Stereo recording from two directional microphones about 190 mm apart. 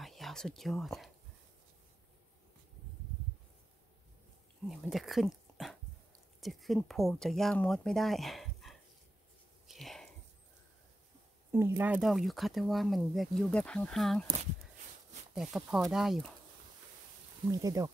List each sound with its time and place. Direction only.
0.0 s speech: centre (ahead or behind)
4.6 s speech: centre (ahead or behind)
9.7 s a sound: centre (ahead or behind)
11.5 s speech: 10° right (ahead or behind)
15.3 s speech: 5° right (ahead or behind)
17.5 s speech: 20° right (ahead or behind)